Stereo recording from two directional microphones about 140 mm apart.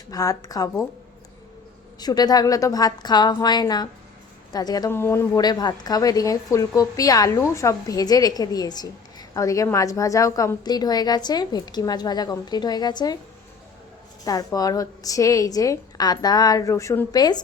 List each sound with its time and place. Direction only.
0.1 s a woman's voice: 25° left (ahead or behind)
2.0 s a woman's voice: 30° left (ahead or behind)
4.9 s speech: 15° left (ahead or behind)
5.4 s a woman's voice: 30° left (ahead or behind)
14.3 s a woman's voice: 25° left (ahead or behind)